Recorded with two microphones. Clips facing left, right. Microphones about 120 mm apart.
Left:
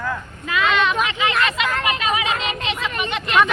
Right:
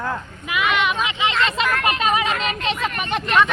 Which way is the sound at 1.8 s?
40° right (ahead or behind).